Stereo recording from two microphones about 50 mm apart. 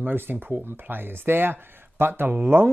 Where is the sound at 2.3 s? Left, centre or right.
Right.